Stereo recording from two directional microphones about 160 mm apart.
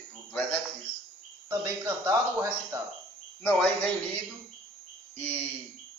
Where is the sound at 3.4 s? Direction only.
10° left (ahead or behind).